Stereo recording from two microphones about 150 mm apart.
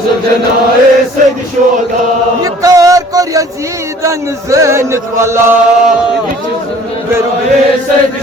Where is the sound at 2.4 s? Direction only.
20° right (ahead or behind).